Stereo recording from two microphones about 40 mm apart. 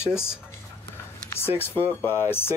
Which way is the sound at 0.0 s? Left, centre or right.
Left.